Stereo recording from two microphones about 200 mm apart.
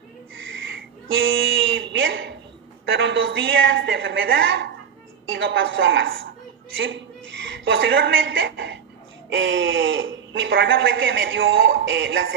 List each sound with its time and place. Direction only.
0.3 s a sound: 70° right (ahead or behind)
2.8 s speech: 65° right (ahead or behind)
6.8 s a woman's voice: 65° right (ahead or behind)